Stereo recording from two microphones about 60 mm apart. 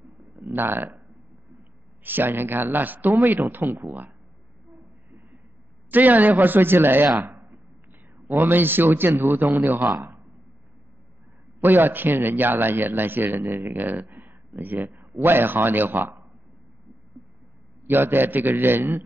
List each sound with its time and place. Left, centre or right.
0.5 s speech: right
2.0 s a man's voice: right
5.9 s a man's voice: right
7.2 s a sound: right
8.5 s a man's voice: right
9.9 s a sound: centre
11.6 s a man's voice: right
13.3 s speech: right
13.7 s a man's voice: right
17.8 s a man's voice: right